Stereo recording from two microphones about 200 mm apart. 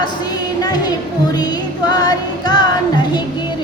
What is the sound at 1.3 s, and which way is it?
Music, 20° left (ahead or behind).